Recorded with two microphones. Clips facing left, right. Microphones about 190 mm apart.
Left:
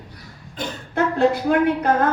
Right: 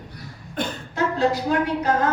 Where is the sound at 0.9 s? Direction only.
55° left (ahead or behind).